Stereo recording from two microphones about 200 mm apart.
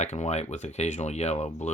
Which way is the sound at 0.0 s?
35° left (ahead or behind).